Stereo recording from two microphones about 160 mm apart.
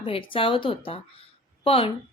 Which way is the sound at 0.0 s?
35° left (ahead or behind).